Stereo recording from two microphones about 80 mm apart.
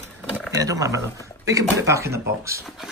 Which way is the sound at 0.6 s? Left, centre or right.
Right.